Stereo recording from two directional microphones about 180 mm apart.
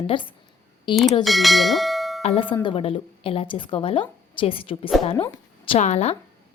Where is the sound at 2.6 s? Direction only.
30° left (ahead or behind).